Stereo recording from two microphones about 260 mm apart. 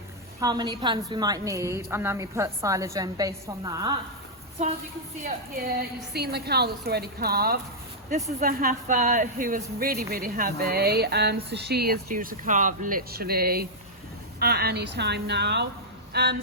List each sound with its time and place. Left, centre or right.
0.3 s a woman's voice: centre
5.2 s speech: right